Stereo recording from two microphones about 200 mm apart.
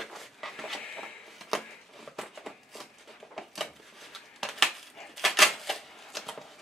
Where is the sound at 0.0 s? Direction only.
Centre (ahead or behind).